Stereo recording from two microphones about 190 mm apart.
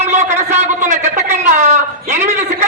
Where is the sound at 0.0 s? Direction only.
35° right (ahead or behind).